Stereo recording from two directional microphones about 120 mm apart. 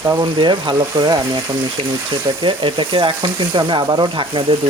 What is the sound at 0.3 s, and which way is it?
Speech, 40° right (ahead or behind).